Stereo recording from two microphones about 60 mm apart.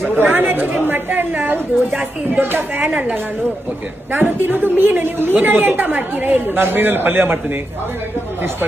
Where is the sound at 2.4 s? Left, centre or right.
Right.